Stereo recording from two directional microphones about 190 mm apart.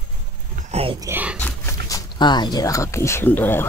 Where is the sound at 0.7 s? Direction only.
30° right (ahead or behind).